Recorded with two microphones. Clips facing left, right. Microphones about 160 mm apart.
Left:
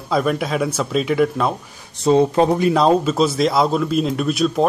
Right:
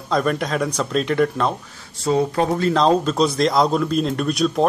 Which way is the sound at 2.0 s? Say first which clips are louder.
Left 5 dB; 20° left (ahead or behind).